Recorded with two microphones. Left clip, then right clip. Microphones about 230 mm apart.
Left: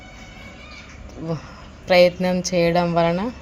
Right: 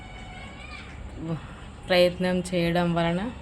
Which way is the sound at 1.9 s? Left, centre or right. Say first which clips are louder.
Left 6 dB; left.